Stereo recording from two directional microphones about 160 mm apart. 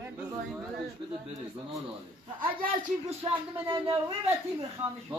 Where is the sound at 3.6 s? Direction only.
30° right (ahead or behind).